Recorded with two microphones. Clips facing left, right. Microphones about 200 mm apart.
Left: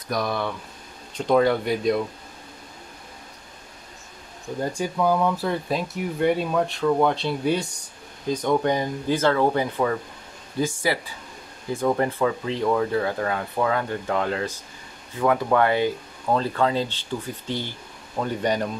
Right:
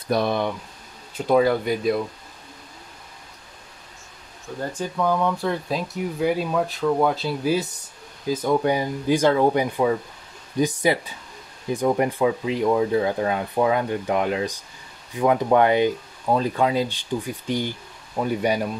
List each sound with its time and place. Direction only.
0.1 s speech: 25° right (ahead or behind)
1.1 s speech: 5° right (ahead or behind)
4.6 s speech: 10° left (ahead or behind); by 18.7 s 10° right (ahead or behind)